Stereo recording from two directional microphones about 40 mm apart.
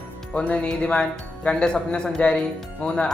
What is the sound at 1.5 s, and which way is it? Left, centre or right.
A woman's voice, centre.